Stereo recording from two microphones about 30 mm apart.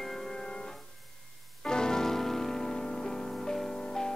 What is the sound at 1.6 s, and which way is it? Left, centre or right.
Music, left.